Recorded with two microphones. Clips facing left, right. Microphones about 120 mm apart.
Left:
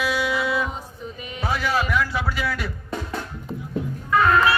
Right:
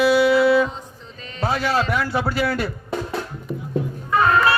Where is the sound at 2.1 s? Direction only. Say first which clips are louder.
Right 4 dB; 30° right (ahead or behind).